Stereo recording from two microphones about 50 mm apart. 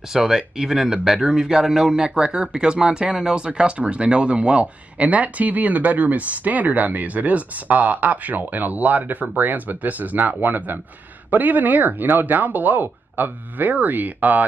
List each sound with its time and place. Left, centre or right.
0.1 s speech: centre; by 14.4 s right